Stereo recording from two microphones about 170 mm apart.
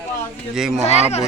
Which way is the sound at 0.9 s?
40° left (ahead or behind).